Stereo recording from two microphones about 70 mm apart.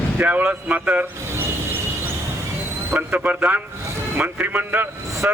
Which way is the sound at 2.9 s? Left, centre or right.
Right.